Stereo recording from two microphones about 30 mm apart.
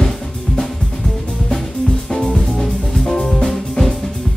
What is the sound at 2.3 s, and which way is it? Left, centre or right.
Music, centre.